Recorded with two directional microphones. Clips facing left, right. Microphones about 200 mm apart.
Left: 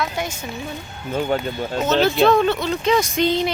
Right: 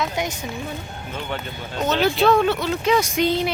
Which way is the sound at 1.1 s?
45° left (ahead or behind).